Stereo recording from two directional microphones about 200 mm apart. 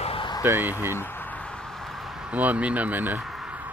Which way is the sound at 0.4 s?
10° right (ahead or behind).